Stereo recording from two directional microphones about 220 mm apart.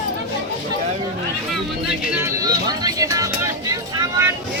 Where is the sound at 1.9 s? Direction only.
5° right (ahead or behind).